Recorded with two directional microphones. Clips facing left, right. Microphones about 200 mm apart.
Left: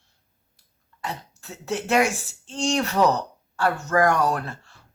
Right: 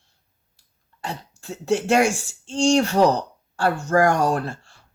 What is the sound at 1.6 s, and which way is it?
A woman's voice, 30° right (ahead or behind).